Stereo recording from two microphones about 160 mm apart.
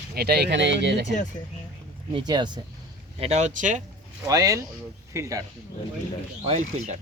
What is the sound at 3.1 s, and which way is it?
Speech, 40° right (ahead or behind).